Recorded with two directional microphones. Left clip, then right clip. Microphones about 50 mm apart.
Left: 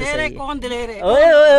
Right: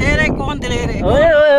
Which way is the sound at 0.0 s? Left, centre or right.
Right.